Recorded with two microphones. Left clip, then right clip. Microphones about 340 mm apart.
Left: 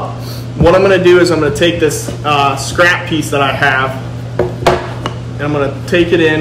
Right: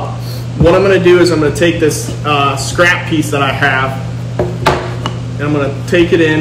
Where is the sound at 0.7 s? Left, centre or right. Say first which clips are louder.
Left 1 dB; centre.